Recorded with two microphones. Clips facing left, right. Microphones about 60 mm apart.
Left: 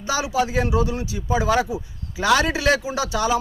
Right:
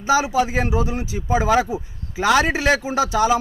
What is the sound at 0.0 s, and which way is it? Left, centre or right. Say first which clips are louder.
Speech: right 4 dB; right.